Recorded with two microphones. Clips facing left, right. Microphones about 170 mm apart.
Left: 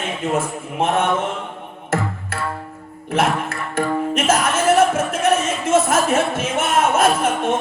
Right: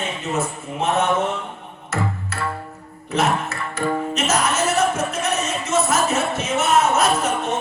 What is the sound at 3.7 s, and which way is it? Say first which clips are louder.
Music: left 3 dB; 50° left (ahead or behind).